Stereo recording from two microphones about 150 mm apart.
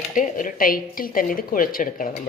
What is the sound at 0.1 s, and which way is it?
A woman's voice, 60° left (ahead or behind).